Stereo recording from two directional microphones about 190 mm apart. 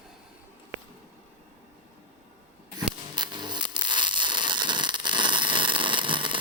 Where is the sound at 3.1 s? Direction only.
25° right (ahead or behind).